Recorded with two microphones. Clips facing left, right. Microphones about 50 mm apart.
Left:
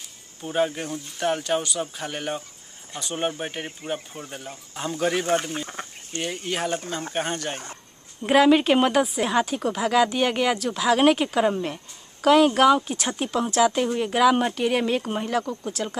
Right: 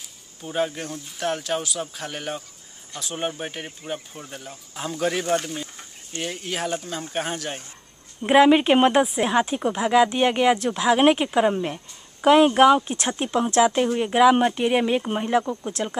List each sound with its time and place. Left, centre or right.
0.4 s speech: centre
5.8 s a sound: left
6.1 s speech: centre
8.2 s speech: centre